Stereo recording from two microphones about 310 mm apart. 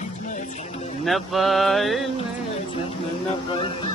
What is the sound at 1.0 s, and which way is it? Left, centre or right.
Mantra, centre.